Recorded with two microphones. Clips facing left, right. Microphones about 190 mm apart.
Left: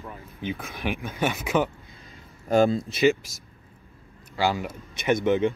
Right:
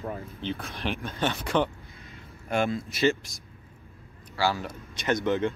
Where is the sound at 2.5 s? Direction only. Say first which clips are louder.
Left 7 dB; 40° left (ahead or behind).